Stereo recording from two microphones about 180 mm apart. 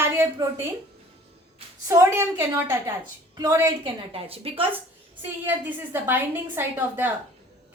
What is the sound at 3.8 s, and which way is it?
Speech, 30° right (ahead or behind).